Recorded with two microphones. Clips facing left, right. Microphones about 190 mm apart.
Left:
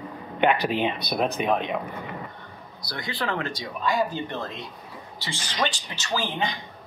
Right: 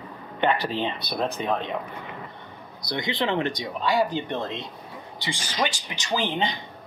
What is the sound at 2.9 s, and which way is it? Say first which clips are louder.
Speech: right 4 dB; 20° right (ahead or behind).